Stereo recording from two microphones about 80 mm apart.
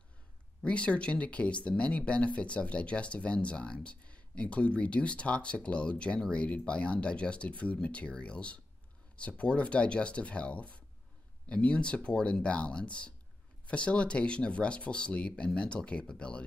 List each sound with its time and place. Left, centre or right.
0.6 s speech: centre